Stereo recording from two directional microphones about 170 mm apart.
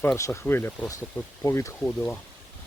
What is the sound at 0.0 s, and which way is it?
Speech, 15° left (ahead or behind).